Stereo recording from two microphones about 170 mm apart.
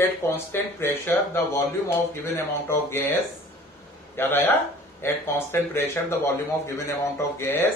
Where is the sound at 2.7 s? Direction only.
15° left (ahead or behind).